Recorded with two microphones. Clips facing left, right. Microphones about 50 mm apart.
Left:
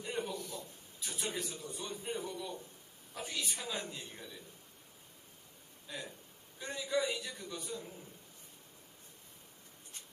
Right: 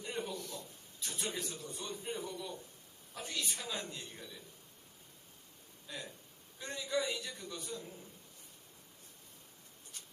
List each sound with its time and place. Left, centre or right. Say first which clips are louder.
0.0 s a man's voice: left 2 dB; centre
5.9 s a man's voice: left 1 dB; centre